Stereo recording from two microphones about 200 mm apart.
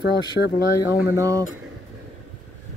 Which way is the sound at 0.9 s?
10° right (ahead or behind).